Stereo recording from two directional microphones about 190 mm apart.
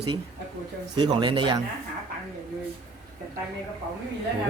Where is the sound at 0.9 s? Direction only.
25° right (ahead or behind).